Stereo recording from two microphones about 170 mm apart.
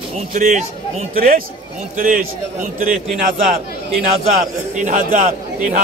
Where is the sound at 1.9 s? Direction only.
55° right (ahead or behind).